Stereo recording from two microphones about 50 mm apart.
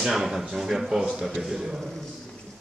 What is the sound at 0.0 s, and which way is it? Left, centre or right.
A man's voice, centre.